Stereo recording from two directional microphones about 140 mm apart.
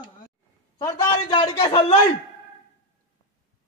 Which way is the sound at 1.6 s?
35° left (ahead or behind).